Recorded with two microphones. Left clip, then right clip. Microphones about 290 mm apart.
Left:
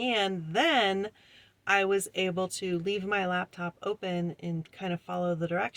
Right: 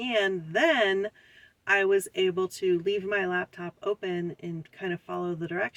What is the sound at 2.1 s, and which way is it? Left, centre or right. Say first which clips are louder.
Speech: right 3 dB; centre.